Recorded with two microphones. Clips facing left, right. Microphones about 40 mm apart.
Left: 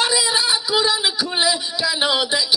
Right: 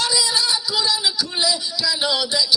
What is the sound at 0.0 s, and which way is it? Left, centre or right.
Speech, left.